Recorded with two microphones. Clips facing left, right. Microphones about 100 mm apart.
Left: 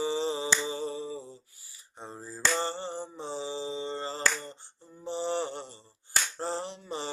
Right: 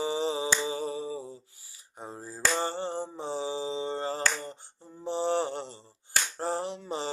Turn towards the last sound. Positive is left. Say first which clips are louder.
# right 3 dB
turn(degrees=-20)  # may be behind; listen again after turning